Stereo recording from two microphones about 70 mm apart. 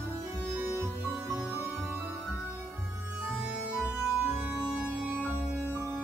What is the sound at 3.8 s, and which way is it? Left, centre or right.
Music, right.